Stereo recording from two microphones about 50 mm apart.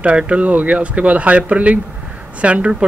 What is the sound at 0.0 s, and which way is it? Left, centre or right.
Speech, right.